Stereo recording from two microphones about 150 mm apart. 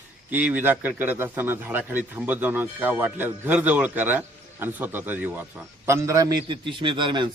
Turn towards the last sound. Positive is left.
turn(degrees=-35)  # may be behind; listen again after turning